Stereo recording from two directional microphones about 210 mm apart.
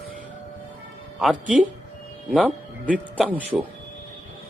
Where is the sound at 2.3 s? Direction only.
5° right (ahead or behind).